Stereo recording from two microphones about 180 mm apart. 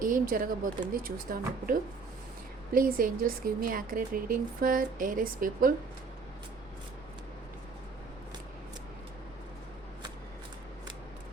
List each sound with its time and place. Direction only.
0.0 s speech: 50° right (ahead or behind)